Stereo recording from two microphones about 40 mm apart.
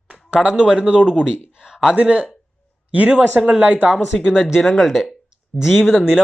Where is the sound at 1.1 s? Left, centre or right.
Centre.